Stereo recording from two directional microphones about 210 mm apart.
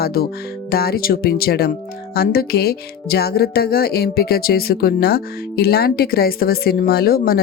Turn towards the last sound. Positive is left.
turn(degrees=45)  # may be behind; listen again after turning